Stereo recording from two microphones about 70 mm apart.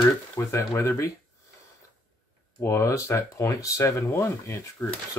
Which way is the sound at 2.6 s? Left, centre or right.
Left.